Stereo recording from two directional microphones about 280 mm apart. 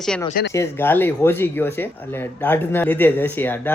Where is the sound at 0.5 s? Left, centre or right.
Centre.